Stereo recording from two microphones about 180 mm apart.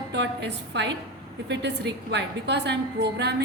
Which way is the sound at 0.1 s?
70° right (ahead or behind).